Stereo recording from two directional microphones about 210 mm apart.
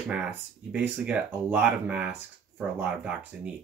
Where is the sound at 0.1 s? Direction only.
5° right (ahead or behind).